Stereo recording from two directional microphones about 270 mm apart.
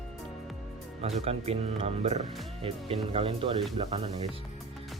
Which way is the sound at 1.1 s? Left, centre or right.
Right.